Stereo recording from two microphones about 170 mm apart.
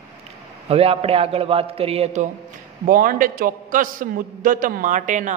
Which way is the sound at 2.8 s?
55° right (ahead or behind).